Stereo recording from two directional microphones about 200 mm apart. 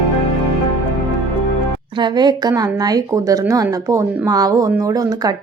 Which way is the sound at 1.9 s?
20° right (ahead or behind).